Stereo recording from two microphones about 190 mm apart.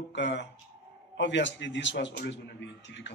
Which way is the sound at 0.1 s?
70° left (ahead or behind).